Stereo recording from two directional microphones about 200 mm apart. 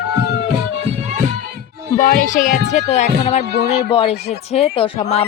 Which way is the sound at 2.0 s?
40° left (ahead or behind).